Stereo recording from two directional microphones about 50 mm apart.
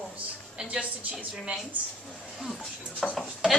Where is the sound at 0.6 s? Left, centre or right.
Right.